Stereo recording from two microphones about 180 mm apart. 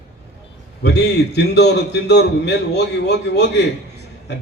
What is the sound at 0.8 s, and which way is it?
A man's voice, 70° left (ahead or behind).